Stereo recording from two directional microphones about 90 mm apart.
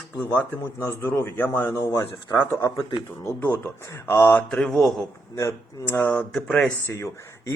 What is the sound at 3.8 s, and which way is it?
Speech, 30° left (ahead or behind).